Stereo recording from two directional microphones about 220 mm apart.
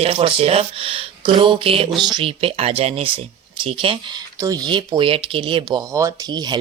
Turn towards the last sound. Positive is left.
turn(degrees=-20)  # may be behind; listen again after turning